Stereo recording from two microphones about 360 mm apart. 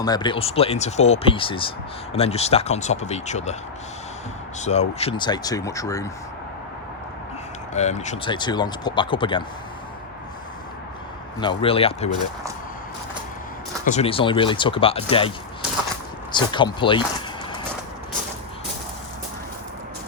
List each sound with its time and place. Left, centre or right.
0.0 s speech: centre
4.6 s speech: centre
7.7 s speech: centre
11.3 s speech: centre
13.8 s speech: centre
16.3 s speech: centre